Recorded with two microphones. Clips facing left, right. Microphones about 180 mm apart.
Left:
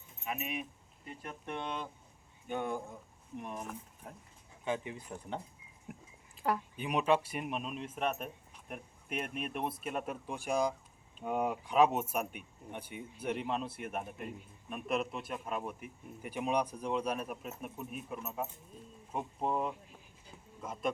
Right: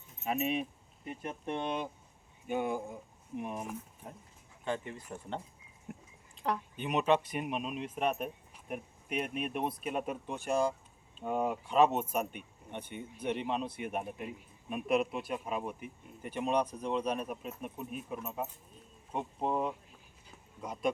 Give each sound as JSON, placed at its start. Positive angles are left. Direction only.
{"t": 0.3, "sound": "speech", "side_deg": -30}
{"t": 2.5, "sound": "speech", "side_deg": -5}
{"t": 4.6, "sound": "speech", "side_deg": 15}
{"t": 5.9, "sound": "speech", "side_deg": 5}
{"t": 10.2, "sound": "speech", "side_deg": 10}
{"t": 11.2, "sound": "speech", "side_deg": -5}
{"t": 11.6, "sound": "speech", "side_deg": 10}